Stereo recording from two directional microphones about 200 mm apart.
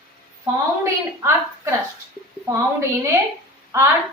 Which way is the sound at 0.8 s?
15° right (ahead or behind).